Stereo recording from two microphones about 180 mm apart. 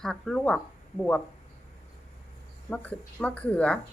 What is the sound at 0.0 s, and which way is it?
Speech, centre (ahead or behind).